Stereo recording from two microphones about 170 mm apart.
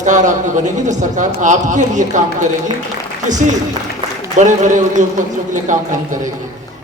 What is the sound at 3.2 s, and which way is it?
A man's voice, 45° right (ahead or behind).